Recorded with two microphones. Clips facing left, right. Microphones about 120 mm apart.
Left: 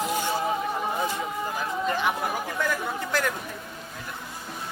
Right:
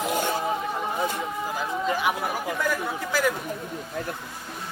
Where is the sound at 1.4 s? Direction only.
5° right (ahead or behind).